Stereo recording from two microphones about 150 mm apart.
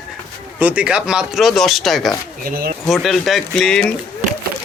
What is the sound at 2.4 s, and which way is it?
Speech, 75° right (ahead or behind).